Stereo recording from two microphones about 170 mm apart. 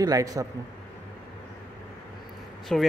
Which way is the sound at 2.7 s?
Centre (ahead or behind).